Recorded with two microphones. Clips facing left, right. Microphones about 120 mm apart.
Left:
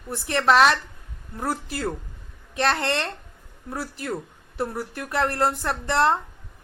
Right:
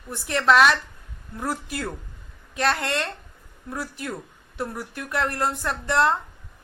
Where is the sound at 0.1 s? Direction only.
30° left (ahead or behind).